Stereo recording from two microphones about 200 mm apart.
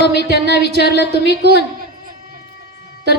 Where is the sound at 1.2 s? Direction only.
55° right (ahead or behind).